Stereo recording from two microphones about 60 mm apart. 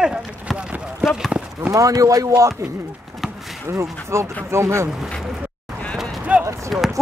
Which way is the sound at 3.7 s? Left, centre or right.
Right.